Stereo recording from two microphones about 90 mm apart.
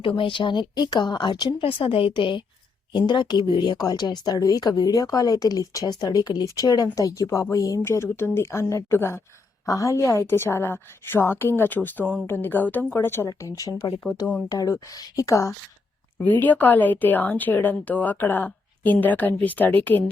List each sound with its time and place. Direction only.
0.0 s a woman's voice: 70° left (ahead or behind); by 7.8 s 40° left (ahead or behind)
7.9 s speech: 30° left (ahead or behind)
9.6 s speech: 40° left (ahead or behind)
13.2 s speech: 40° left (ahead or behind)
16.1 s speech: 20° left (ahead or behind)